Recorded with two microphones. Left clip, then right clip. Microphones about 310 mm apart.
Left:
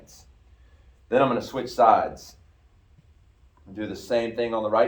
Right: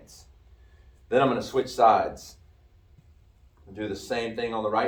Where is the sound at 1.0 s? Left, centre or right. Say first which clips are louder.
Left 1 dB; centre.